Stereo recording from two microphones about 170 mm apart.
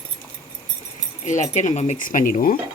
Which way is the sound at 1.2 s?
45° left (ahead or behind).